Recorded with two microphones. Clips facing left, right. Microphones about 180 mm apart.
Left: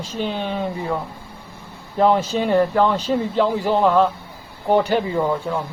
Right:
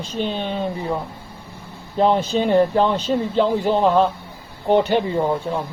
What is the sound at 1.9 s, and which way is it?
Speech, 25° right (ahead or behind).